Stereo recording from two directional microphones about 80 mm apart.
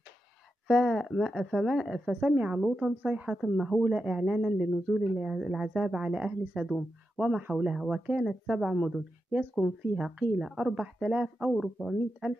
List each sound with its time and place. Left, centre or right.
0.7 s speech: centre
2.3 s speech: centre
3.3 s speech: centre
3.8 s speech: centre
10.4 s speech: centre
11.5 s speech: centre